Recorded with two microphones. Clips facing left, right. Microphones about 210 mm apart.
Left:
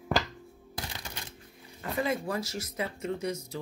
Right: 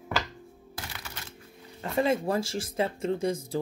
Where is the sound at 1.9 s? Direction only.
30° right (ahead or behind).